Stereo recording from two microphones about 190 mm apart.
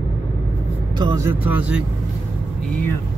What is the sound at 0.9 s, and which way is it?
Speech, 20° right (ahead or behind).